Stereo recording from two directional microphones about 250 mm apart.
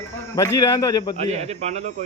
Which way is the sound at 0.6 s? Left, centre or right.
Centre.